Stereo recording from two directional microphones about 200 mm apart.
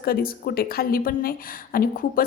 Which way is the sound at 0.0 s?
45° left (ahead or behind).